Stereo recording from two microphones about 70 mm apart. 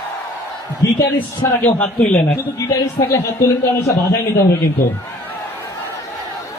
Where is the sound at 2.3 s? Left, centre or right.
Left.